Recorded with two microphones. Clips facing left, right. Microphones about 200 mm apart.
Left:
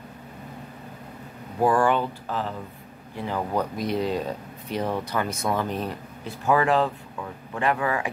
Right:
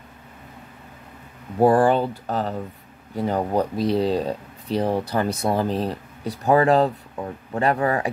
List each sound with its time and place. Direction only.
1.6 s speech: 35° right (ahead or behind)